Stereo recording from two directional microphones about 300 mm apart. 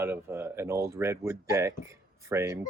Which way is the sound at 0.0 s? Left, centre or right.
Centre.